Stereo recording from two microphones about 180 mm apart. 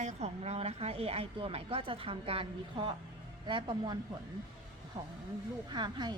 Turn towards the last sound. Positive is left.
turn(degrees=-25)  # may be behind; listen again after turning